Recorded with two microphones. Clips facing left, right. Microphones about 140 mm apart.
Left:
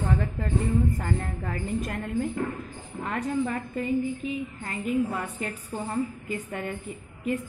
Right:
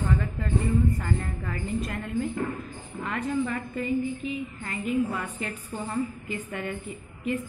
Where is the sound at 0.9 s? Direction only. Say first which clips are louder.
Even; 40° left (ahead or behind).